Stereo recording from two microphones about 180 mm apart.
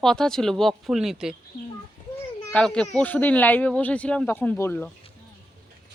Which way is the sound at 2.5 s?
5° left (ahead or behind).